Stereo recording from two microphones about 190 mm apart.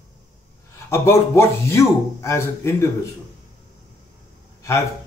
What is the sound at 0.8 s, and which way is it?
A man's voice, 15° left (ahead or behind).